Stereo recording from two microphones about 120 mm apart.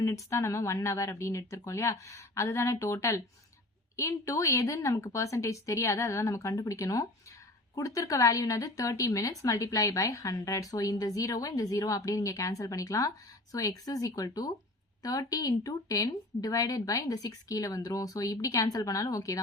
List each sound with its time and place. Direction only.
0.0 s speech: 25° left (ahead or behind)